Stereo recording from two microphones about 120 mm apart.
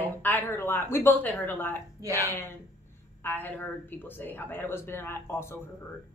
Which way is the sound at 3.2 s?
15° left (ahead or behind).